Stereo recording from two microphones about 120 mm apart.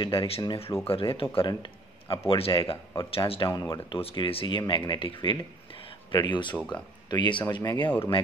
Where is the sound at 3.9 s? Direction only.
45° left (ahead or behind).